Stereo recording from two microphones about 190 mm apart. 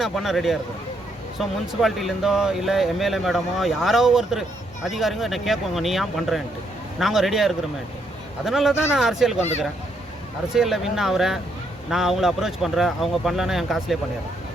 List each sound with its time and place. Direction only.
0.0 s speech: centre (ahead or behind)
1.8 s speech: centre (ahead or behind)
10.5 s speech: centre (ahead or behind)